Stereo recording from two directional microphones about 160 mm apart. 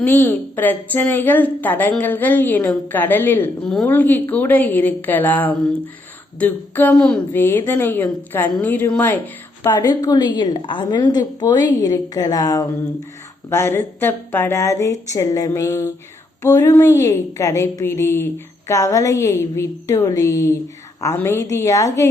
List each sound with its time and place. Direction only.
0.0 s a woman's voice: 15° left (ahead or behind)